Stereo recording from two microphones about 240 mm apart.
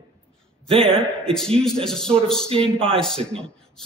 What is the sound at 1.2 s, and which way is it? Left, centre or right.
A man's voice, centre.